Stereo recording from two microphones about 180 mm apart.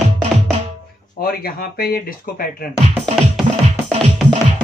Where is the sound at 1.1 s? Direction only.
55° left (ahead or behind).